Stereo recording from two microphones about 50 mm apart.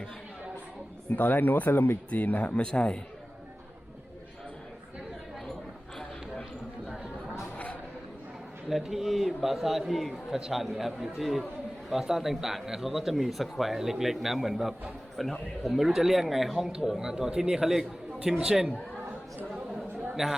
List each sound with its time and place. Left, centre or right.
1.1 s speech: left
2.0 s speech: left
2.6 s a man's voice: centre
7.5 s chatter: left
8.9 s a man's voice: centre
20.2 s a man's voice: centre